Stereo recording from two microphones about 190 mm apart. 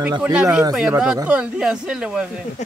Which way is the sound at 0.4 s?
5° right (ahead or behind).